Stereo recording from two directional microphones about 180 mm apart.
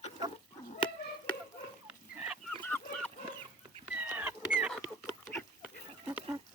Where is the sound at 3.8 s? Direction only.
10° right (ahead or behind).